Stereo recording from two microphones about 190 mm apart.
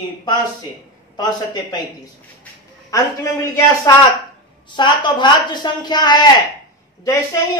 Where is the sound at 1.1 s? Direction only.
25° left (ahead or behind).